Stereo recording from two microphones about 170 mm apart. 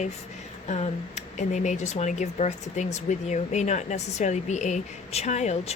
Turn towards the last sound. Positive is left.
turn(degrees=40)  # may be behind; listen again after turning